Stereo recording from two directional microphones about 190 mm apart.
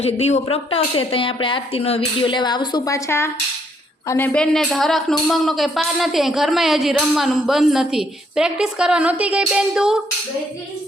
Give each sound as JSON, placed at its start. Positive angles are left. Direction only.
{"t": 0.0, "sound": "a woman's voice", "side_deg": 35}